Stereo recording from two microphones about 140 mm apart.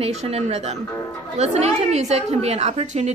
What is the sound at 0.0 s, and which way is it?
A woman's voice, 50° right (ahead or behind).